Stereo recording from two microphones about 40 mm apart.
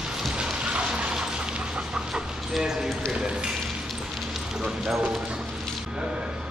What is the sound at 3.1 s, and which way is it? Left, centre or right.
Speech, right.